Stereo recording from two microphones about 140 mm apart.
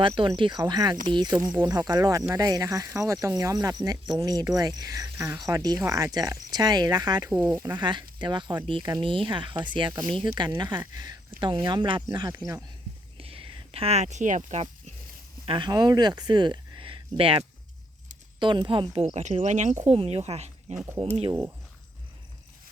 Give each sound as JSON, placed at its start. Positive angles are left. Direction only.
{"t": 0.2, "sound": "speech", "side_deg": -35}
{"t": 13.1, "sound": "a sound", "side_deg": -45}
{"t": 15.4, "sound": "speech", "side_deg": -35}
{"t": 20.0, "sound": "speech", "side_deg": -45}